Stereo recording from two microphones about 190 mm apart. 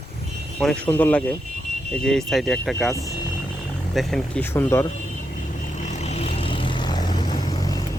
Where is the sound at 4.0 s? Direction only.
Centre (ahead or behind).